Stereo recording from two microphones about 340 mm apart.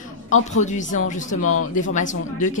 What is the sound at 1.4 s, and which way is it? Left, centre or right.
Speech, left.